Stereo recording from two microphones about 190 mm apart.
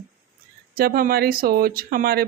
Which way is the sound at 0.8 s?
50° right (ahead or behind).